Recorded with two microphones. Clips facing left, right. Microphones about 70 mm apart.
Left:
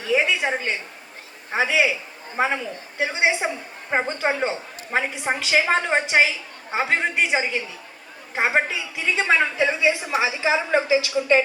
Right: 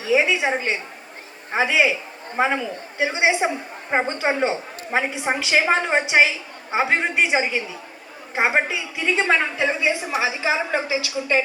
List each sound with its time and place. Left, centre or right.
0.1 s a woman's voice: centre
9.6 s a woman's voice: right
10.8 s a woman's voice: left